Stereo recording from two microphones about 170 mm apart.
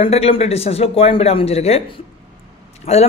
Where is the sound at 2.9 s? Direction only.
40° left (ahead or behind).